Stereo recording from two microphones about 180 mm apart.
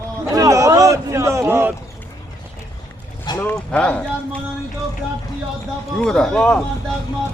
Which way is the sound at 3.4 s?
10° left (ahead or behind).